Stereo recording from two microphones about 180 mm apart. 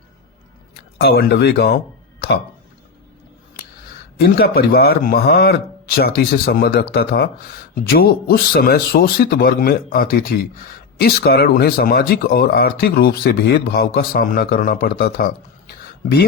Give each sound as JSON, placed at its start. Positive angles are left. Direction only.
{"t": 0.9, "sound": "speech", "side_deg": 60}
{"t": 4.2, "sound": "speech", "side_deg": 60}